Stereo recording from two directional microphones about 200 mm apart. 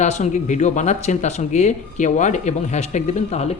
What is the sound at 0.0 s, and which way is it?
Speech, 35° left (ahead or behind).